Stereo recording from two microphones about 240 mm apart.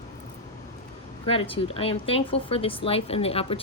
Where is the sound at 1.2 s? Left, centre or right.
Left.